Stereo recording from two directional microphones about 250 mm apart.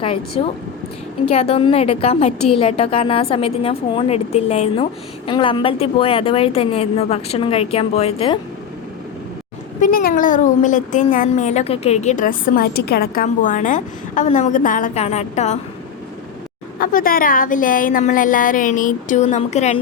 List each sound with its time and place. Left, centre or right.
0.0 s a woman's voice: left
9.8 s a woman's voice: left
16.8 s a woman's voice: left